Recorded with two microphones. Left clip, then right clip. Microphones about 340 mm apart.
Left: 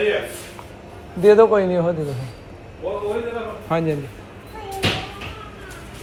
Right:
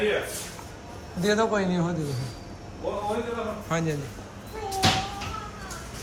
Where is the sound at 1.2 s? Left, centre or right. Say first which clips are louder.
Left 11 dB; centre.